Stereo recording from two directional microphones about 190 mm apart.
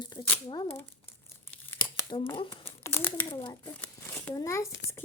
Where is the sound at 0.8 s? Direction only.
10° left (ahead or behind).